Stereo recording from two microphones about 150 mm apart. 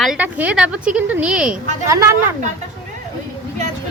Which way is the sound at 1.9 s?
20° right (ahead or behind).